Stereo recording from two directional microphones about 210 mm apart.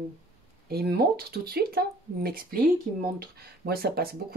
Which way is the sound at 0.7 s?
50° right (ahead or behind).